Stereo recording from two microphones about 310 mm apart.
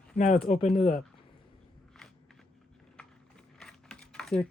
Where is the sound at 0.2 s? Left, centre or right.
Left.